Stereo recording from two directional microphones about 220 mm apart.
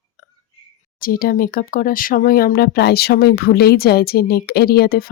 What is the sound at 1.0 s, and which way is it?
Speech, 40° left (ahead or behind).